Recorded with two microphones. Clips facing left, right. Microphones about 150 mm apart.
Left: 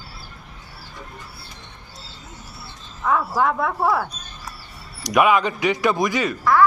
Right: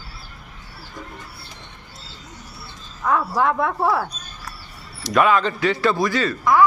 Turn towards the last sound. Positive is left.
turn(degrees=-15)  # may be behind; listen again after turning